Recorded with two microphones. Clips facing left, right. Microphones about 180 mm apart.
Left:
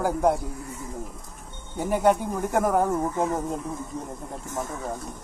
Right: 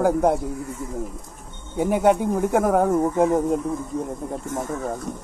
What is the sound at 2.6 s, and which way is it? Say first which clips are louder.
Speech: right 1 dB; centre (ahead or behind).